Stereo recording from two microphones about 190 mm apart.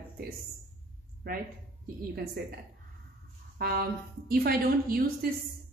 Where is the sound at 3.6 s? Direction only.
50° right (ahead or behind).